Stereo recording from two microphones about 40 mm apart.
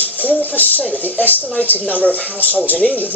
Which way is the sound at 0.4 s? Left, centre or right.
Left.